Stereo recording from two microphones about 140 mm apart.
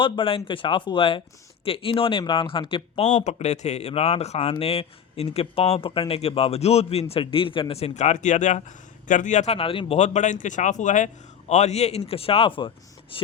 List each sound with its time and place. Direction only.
0.0 s speech: 40° left (ahead or behind)
3.1 s speech: 55° left (ahead or behind)
9.6 s speech: 40° left (ahead or behind)